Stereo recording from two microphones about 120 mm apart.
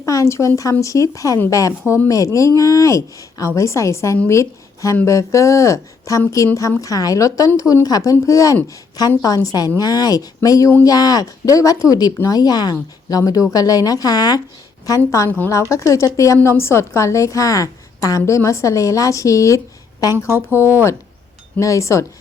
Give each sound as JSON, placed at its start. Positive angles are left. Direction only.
{"t": 0.0, "sound": "a woman's voice", "side_deg": 25}
{"t": 15.3, "sound": "a woman's voice", "side_deg": 15}
{"t": 15.7, "sound": "a woman's voice", "side_deg": 25}
{"t": 20.5, "sound": "speech", "side_deg": -15}
{"t": 21.6, "sound": "a woman's voice", "side_deg": 25}